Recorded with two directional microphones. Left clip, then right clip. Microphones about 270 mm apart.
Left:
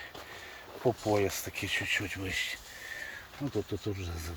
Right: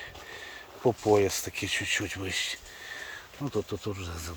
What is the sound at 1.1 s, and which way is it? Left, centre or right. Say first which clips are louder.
Speech: right 5 dB; centre.